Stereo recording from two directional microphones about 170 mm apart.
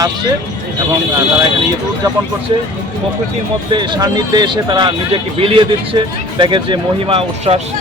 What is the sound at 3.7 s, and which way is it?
Speech, 25° right (ahead or behind).